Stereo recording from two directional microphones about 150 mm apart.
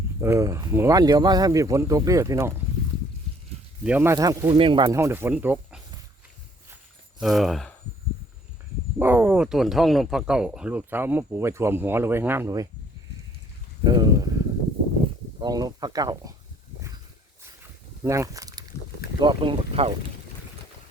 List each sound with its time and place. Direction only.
0.2 s speech: 20° right (ahead or behind)
3.8 s speech: 15° right (ahead or behind)
4.5 s speech: 35° right (ahead or behind)
4.9 s speech: 20° right (ahead or behind)
7.2 s speech: centre (ahead or behind)
9.0 s speech: 10° right (ahead or behind)
13.8 s a sound: 30° right (ahead or behind)
15.4 s speech: 25° right (ahead or behind)
18.0 s speech: 20° right (ahead or behind); by 19.9 s 40° right (ahead or behind)